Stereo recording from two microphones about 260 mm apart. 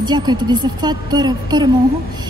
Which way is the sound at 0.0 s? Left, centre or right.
Centre.